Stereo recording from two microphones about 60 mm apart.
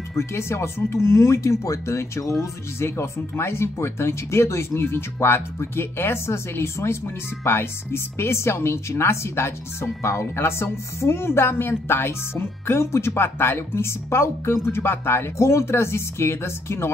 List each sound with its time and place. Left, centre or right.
0.1 s speech: left